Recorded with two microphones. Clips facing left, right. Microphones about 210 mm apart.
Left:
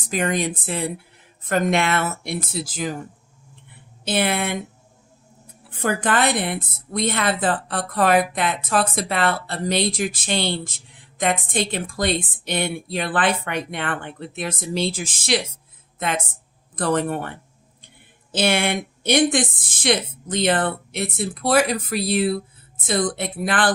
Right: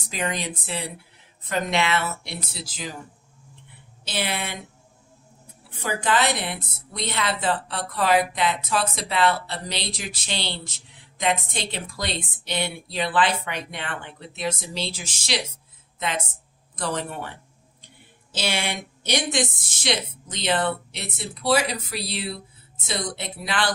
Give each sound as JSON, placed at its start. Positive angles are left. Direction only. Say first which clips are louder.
{"t": 0.1, "sound": "a woman's voice", "louder": "left 6 dB", "side_deg": 50}
{"t": 4.0, "sound": "a woman's voice", "louder": "left 7 dB", "side_deg": 55}
{"t": 5.8, "sound": "a woman's voice", "louder": "left 3 dB", "side_deg": 55}